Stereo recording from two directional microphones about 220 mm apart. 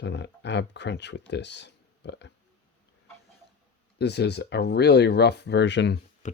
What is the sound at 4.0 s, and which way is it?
Speech, 50° left (ahead or behind).